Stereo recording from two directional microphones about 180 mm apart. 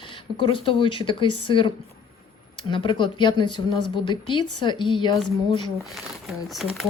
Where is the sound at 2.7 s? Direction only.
25° left (ahead or behind).